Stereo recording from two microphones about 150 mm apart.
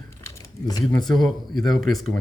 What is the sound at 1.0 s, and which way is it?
Speech, centre (ahead or behind).